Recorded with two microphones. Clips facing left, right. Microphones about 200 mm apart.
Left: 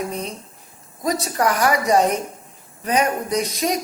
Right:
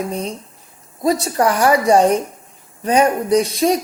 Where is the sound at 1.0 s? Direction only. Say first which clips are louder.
Right 4 dB; 30° right (ahead or behind).